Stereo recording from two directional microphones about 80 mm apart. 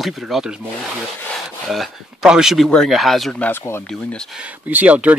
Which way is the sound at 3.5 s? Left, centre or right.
Left.